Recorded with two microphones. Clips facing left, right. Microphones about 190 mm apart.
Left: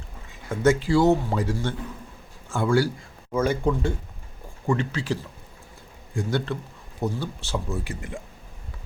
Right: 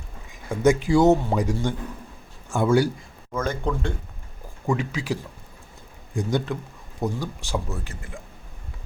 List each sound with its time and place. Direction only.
0.5 s speech: 15° right (ahead or behind)
3.3 s speech: 10° left (ahead or behind)
4.6 s speech: 10° right (ahead or behind)
7.9 s speech: 20° left (ahead or behind)